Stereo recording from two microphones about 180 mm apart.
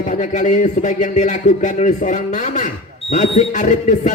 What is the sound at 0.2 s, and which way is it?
Speech, 45° left (ahead or behind).